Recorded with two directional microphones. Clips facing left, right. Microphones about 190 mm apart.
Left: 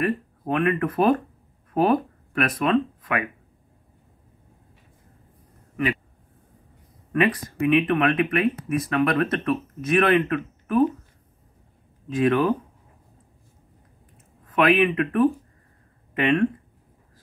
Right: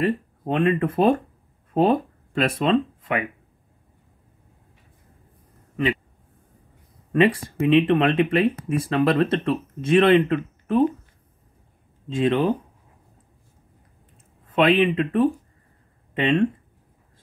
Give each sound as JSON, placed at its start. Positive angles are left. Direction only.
{"t": 0.0, "sound": "speech", "side_deg": -25}
{"t": 7.1, "sound": "speech", "side_deg": -30}
{"t": 12.1, "sound": "speech", "side_deg": -25}
{"t": 14.5, "sound": "speech", "side_deg": -25}